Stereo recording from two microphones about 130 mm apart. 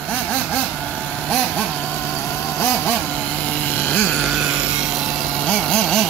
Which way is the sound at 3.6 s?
15° left (ahead or behind).